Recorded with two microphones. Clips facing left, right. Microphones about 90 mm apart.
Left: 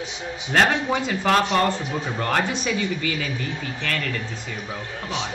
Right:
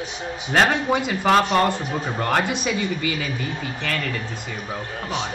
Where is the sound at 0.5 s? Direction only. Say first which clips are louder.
Right 1 dB; 10° right (ahead or behind).